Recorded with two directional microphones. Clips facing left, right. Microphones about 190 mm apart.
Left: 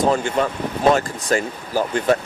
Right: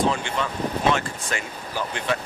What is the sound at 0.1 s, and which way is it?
Speech, 40° left (ahead or behind).